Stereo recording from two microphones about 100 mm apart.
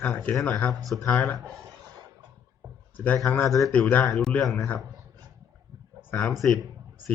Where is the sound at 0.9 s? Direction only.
10° left (ahead or behind).